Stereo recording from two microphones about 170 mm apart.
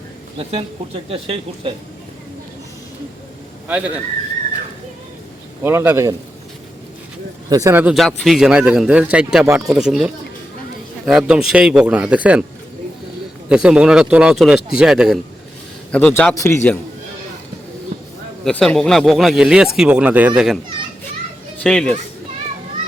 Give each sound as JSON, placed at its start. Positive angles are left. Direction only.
{"t": 0.3, "sound": "speech", "side_deg": -35}
{"t": 3.7, "sound": "a man's voice", "side_deg": -10}
{"t": 5.6, "sound": "a man's voice", "side_deg": -15}
{"t": 7.5, "sound": "speech", "side_deg": -15}
{"t": 13.5, "sound": "speech", "side_deg": -5}
{"t": 15.9, "sound": "a man's voice", "side_deg": 5}
{"t": 18.4, "sound": "speech", "side_deg": 5}
{"t": 21.6, "sound": "speech", "side_deg": 5}